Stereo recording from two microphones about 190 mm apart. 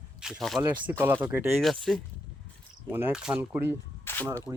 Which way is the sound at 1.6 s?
Centre (ahead or behind).